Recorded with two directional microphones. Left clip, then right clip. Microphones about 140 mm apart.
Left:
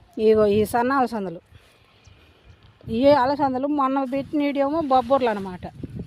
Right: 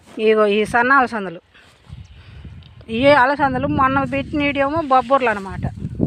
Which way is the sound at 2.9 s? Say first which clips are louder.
Right 4 dB; centre (ahead or behind).